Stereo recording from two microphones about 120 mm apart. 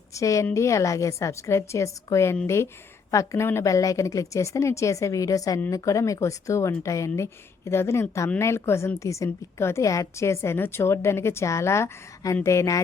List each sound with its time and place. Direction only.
0.1 s a woman's voice: 25° left (ahead or behind)